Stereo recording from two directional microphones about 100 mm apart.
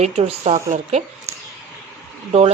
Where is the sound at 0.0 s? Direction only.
90° right.